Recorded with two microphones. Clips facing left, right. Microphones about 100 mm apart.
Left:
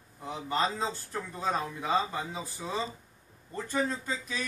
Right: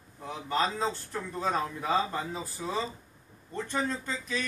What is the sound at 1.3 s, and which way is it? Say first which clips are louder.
A man's voice: right 2 dB; 5° left (ahead or behind).